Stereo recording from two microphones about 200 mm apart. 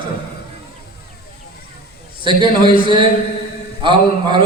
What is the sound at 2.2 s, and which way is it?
A man's voice, 25° right (ahead or behind).